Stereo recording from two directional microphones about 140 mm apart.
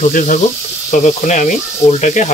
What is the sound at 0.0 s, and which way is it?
Speech, 65° left (ahead or behind).